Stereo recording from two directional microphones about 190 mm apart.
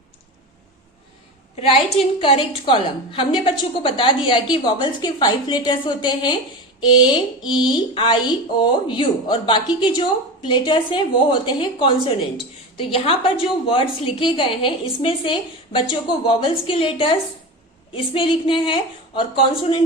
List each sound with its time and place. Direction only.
1.5 s a woman's voice: 30° left (ahead or behind)